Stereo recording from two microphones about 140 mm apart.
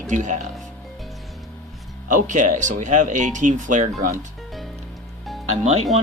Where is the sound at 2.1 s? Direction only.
65° right (ahead or behind).